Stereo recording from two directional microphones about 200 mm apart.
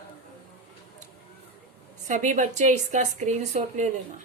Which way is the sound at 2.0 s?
40° right (ahead or behind).